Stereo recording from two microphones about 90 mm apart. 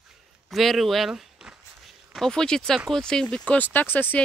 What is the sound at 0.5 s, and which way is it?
Speech, centre (ahead or behind).